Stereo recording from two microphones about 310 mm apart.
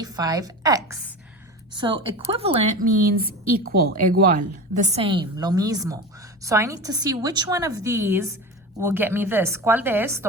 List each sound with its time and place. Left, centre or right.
0.0 s a woman's voice: centre